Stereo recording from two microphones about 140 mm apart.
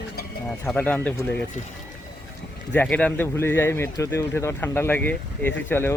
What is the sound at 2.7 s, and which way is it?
Speech, 10° left (ahead or behind).